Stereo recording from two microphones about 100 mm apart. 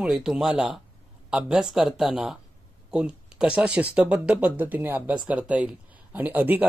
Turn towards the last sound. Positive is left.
turn(degrees=-15)  # may be behind; listen again after turning